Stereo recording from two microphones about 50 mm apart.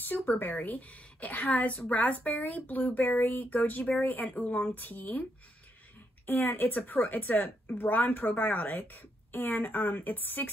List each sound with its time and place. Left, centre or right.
0.0 s a woman's voice: left
6.2 s a woman's voice: left